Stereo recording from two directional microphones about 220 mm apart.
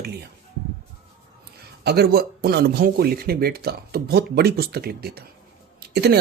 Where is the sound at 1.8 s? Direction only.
45° right (ahead or behind).